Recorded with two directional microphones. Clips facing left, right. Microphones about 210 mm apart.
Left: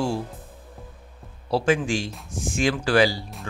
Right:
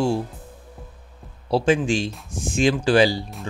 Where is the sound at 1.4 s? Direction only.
20° right (ahead or behind).